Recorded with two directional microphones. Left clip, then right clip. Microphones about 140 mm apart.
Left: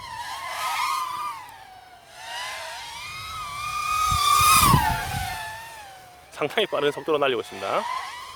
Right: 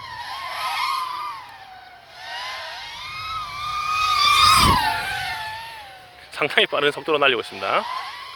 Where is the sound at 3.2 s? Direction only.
20° left (ahead or behind).